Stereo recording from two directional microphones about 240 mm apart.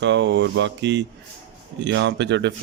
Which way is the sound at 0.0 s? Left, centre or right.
Right.